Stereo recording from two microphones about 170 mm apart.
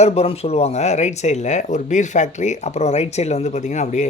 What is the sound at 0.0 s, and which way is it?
A man's voice, 35° left (ahead or behind).